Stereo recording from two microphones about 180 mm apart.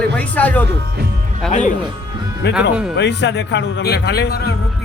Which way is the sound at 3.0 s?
70° left (ahead or behind).